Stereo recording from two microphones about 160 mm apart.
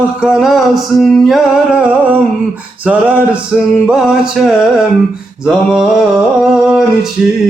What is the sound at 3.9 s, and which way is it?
Male singing, 5° right (ahead or behind).